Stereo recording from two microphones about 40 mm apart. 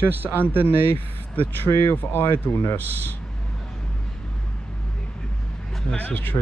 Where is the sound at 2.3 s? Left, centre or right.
Left.